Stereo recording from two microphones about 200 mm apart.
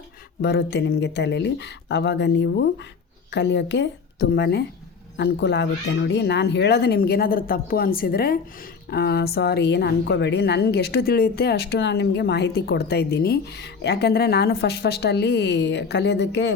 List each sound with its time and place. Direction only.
0.4 s speech: 55° left (ahead or behind)